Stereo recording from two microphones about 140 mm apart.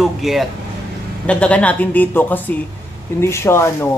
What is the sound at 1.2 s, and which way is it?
A woman's voice, 10° left (ahead or behind).